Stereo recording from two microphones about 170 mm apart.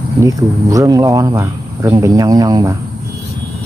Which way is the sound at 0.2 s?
20° right (ahead or behind).